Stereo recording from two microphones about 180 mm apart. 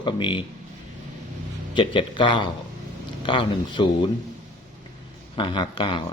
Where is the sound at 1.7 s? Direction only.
30° left (ahead or behind).